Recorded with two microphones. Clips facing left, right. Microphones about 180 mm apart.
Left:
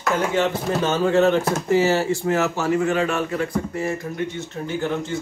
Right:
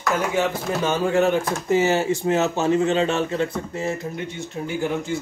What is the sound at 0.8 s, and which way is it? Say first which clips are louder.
A man's voice: left 2 dB; 15° right (ahead or behind).